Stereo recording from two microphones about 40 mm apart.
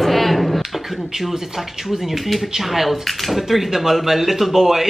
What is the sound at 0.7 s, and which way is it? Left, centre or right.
Speech, centre.